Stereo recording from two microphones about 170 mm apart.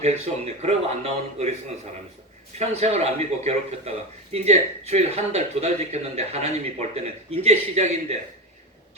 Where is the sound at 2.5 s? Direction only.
40° right (ahead or behind).